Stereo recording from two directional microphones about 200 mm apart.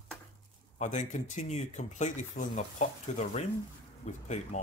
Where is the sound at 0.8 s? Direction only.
35° left (ahead or behind).